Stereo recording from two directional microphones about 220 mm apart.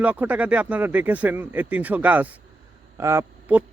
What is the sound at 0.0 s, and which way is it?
Speech, 5° right (ahead or behind).